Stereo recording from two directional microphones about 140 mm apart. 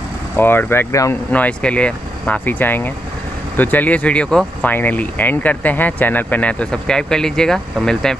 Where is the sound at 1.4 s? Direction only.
10° left (ahead or behind).